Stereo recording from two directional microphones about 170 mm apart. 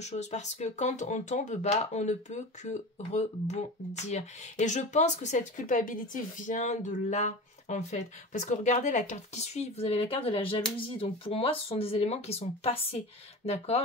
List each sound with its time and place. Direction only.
0.0 s speech: 40° left (ahead or behind)